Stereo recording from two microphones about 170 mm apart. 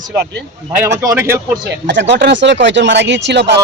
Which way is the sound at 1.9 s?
90° right.